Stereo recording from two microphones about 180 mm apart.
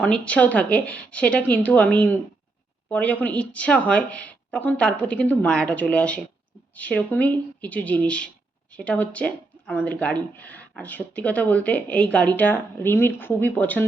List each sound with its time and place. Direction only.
0.0 s speech: 5° left (ahead or behind)